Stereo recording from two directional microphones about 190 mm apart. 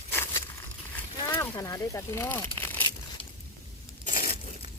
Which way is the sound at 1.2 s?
20° left (ahead or behind).